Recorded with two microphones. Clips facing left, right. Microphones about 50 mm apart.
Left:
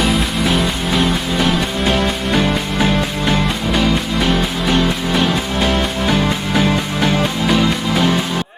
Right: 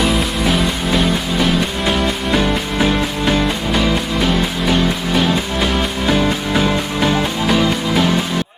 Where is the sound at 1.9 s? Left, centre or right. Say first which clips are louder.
Even; centre.